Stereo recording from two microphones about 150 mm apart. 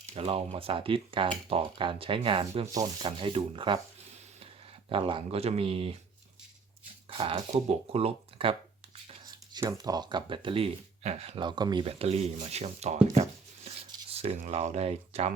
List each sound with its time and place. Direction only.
0.1 s speech: 40° right (ahead or behind)
4.9 s speech: 35° right (ahead or behind)
7.1 s speech: 35° right (ahead or behind)
9.0 s speech: 30° right (ahead or behind)
11.9 s speech: 45° right (ahead or behind)
13.7 s a sound: 40° right (ahead or behind)